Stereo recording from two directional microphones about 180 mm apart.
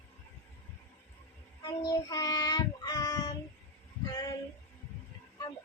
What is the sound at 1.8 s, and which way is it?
Child singing, 20° left (ahead or behind).